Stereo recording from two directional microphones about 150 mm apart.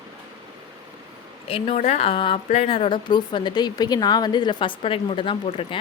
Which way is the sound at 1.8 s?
50° left (ahead or behind).